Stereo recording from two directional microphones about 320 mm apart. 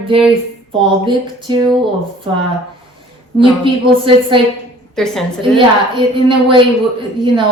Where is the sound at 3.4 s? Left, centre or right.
Centre.